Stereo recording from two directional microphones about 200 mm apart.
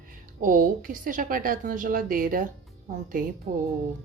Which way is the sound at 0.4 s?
45° right (ahead or behind).